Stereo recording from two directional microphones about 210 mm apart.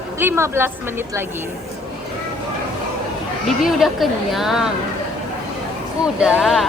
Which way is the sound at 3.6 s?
Centre (ahead or behind).